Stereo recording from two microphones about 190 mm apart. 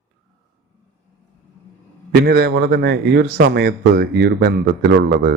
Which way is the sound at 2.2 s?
55° right (ahead or behind).